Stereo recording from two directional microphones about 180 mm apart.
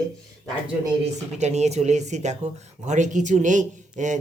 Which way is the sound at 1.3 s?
40° right (ahead or behind).